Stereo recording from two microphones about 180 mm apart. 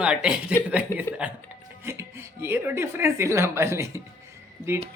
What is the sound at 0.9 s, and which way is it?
Speech, 15° left (ahead or behind).